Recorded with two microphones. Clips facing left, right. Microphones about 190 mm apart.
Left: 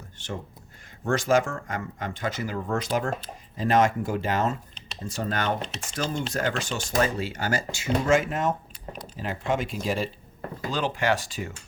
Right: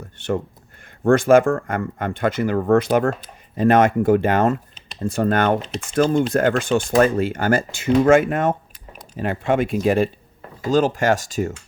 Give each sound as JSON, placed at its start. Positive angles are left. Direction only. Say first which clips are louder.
{"t": 1.0, "sound": "speech", "louder": "right 9 dB", "side_deg": -55}
{"t": 10.7, "sound": "speech", "louder": "right 9 dB", "side_deg": -45}